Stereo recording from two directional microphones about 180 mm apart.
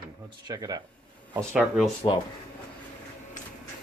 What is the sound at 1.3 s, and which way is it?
Speech, 5° right (ahead or behind).